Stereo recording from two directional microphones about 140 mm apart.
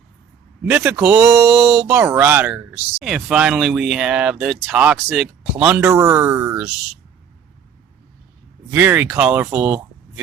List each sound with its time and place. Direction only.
0.8 s speech: 5° right (ahead or behind)
1.3 s speech: 5° right (ahead or behind)
1.9 s speech: 20° right (ahead or behind)
5.8 s speech: 20° right (ahead or behind)
8.7 s speech: 15° right (ahead or behind)